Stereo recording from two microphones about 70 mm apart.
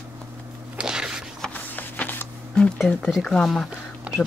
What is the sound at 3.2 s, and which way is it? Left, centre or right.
Speech, centre.